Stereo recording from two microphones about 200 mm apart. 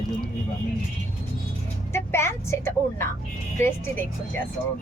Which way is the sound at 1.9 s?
15° left (ahead or behind).